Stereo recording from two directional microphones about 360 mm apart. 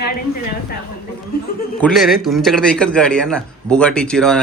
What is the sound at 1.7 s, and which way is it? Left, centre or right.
A man's voice, centre.